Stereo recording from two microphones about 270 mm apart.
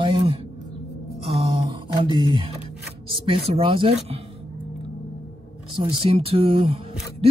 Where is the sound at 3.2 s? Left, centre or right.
Right.